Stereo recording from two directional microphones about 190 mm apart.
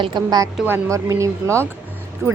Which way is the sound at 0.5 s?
10° right (ahead or behind).